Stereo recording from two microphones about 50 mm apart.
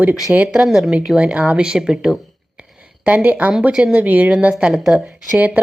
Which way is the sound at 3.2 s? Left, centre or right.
Right.